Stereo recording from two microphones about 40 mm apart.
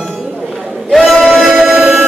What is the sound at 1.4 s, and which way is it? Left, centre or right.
Music, centre.